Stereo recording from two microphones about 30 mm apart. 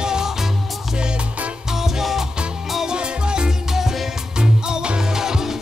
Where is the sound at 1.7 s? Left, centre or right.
Centre.